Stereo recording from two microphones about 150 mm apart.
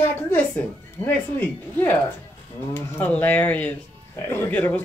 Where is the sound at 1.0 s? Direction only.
15° left (ahead or behind).